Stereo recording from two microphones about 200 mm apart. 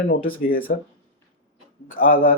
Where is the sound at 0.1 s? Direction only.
45° left (ahead or behind).